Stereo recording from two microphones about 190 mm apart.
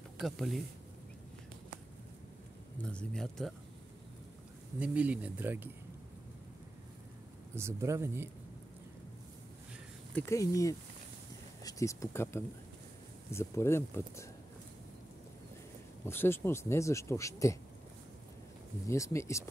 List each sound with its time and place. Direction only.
0.2 s speech: centre (ahead or behind)
2.8 s speech: 5° left (ahead or behind)
4.7 s speech: 5° right (ahead or behind)
7.5 s speech: 15° right (ahead or behind)
10.1 s speech: 15° left (ahead or behind)
16.1 s speech: 10° left (ahead or behind)
18.9 s speech: 15° left (ahead or behind)